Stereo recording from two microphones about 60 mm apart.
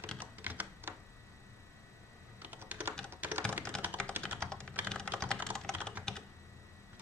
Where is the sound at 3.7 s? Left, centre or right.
Centre.